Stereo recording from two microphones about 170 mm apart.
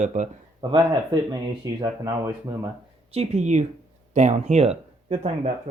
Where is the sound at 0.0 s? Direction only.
45° right (ahead or behind).